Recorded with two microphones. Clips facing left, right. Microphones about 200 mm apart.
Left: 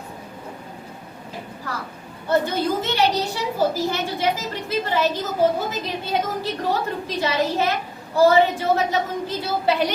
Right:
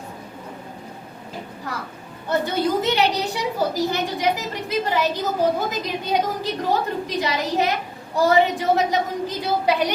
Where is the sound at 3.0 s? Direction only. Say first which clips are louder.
Even; 15° right (ahead or behind).